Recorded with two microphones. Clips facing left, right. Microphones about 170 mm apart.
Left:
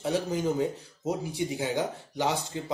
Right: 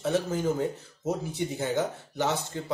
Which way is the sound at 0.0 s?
15° left (ahead or behind).